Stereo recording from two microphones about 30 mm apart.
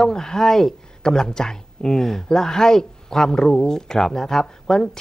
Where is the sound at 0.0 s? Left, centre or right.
Centre.